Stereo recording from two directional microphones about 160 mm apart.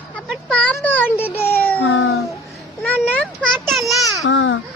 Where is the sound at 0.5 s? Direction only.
5° left (ahead or behind).